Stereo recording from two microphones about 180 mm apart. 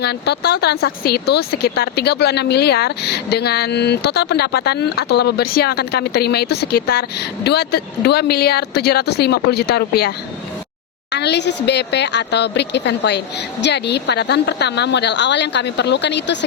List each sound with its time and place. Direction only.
0.0 s speech: 65° left (ahead or behind)
11.1 s speech: 70° left (ahead or behind)